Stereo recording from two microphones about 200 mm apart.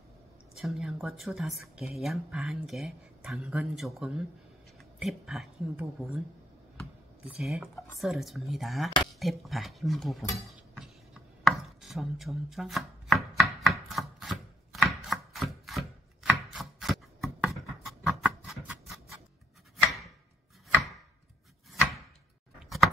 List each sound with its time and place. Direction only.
0.6 s speech: centre (ahead or behind)
7.2 s speech: centre (ahead or behind)
10.3 s a sound: centre (ahead or behind)
11.4 s chopping: centre (ahead or behind)